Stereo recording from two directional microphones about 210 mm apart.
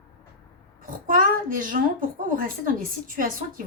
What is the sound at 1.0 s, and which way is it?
A woman's voice, 40° right (ahead or behind).